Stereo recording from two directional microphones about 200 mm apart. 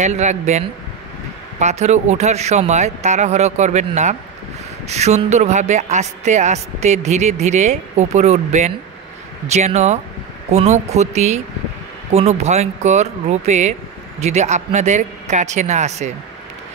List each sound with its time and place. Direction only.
0.0 s speech: 35° right (ahead or behind)